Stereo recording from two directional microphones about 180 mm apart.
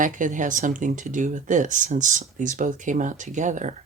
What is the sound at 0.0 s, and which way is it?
Speech, 45° right (ahead or behind).